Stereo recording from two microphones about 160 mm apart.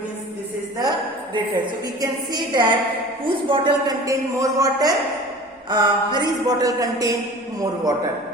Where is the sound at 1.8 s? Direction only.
25° right (ahead or behind).